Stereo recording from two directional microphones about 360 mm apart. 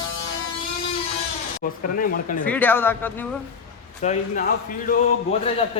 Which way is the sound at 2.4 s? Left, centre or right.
Centre.